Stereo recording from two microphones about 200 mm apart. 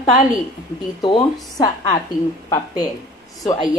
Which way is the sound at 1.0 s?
25° left (ahead or behind).